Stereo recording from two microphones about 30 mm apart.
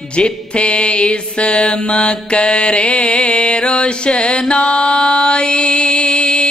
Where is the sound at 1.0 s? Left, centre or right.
Left.